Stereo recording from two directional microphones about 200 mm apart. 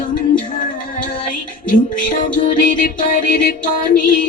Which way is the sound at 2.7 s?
45° left (ahead or behind).